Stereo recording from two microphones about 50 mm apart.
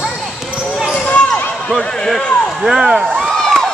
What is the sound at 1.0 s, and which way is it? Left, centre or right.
Basketball bounce, left.